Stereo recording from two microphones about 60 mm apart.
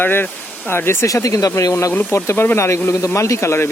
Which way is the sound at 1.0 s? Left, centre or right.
Left.